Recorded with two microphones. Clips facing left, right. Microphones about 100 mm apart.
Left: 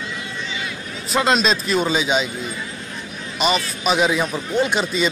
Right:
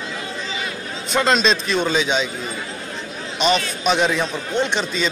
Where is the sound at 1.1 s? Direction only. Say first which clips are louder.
Even; 5° left (ahead or behind).